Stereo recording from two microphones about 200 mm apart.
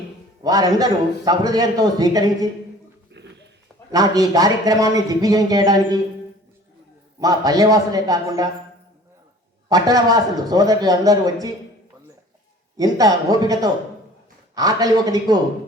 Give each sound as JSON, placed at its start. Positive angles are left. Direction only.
{"t": 0.4, "sound": "a man's voice", "side_deg": -20}
{"t": 3.1, "sound": "a sound", "side_deg": -60}
{"t": 3.9, "sound": "a man's voice", "side_deg": -20}
{"t": 7.2, "sound": "a man's voice", "side_deg": -20}
{"t": 9.6, "sound": "a man's voice", "side_deg": -20}
{"t": 12.7, "sound": "speech", "side_deg": -20}